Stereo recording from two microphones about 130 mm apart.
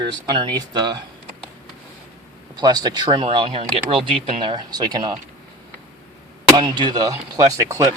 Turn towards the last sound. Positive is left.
turn(degrees=-25)  # may be behind; listen again after turning